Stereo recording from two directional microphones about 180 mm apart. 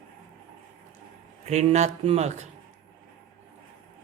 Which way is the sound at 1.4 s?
40° right (ahead or behind).